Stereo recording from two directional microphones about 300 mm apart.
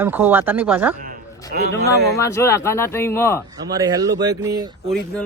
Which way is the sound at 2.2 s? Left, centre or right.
Centre.